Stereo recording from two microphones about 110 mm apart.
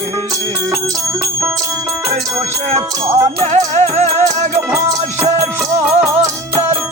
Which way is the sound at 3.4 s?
85° right.